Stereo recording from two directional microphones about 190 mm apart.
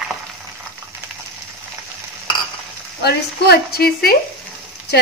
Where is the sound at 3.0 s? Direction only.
60° left (ahead or behind).